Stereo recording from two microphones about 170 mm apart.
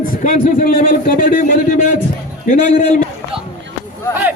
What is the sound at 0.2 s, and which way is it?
A man's voice, 50° left (ahead or behind).